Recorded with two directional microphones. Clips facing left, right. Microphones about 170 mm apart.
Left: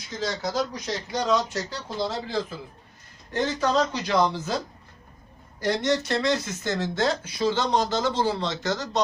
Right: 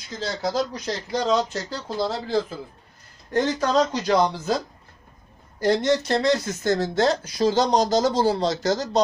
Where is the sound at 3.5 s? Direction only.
40° right (ahead or behind).